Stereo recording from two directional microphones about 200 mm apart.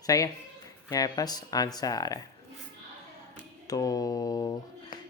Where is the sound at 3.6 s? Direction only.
20° left (ahead or behind).